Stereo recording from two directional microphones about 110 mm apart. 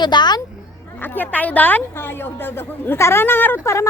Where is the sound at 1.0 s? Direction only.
15° left (ahead or behind).